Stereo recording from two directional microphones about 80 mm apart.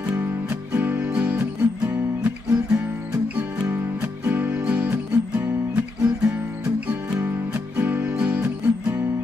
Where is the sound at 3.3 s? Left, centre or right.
Centre.